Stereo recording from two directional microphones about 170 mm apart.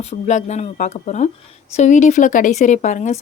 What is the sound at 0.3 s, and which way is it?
Speech, 45° left (ahead or behind).